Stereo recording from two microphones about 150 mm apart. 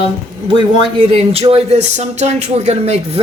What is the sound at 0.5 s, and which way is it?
Speech, 35° right (ahead or behind).